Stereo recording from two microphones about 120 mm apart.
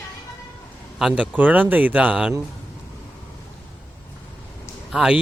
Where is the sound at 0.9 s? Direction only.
5° right (ahead or behind).